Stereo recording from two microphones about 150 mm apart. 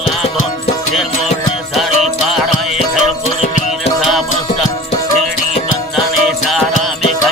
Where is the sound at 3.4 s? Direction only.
50° left (ahead or behind).